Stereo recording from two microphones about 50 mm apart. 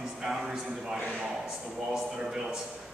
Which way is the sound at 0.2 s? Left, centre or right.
Centre.